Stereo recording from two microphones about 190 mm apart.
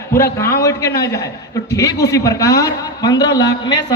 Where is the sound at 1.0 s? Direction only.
15° left (ahead or behind).